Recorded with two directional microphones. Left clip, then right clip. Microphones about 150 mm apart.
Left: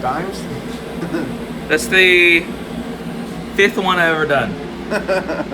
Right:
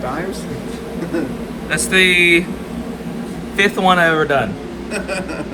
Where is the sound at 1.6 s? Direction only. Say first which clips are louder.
Left 2 dB; 40° right (ahead or behind).